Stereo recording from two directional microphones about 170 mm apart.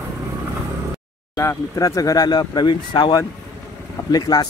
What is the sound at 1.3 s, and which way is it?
Speech, 20° left (ahead or behind).